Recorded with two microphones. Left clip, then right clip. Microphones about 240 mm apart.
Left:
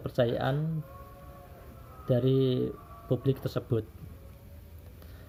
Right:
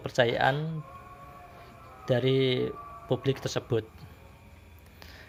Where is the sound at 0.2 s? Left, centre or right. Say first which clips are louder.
Right 4 dB; right.